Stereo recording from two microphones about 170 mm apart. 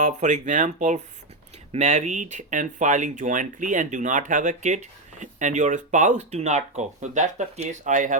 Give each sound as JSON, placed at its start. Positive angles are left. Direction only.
{"t": 0.0, "sound": "speech", "side_deg": -45}